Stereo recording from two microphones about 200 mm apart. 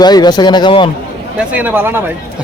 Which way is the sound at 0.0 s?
20° left (ahead or behind).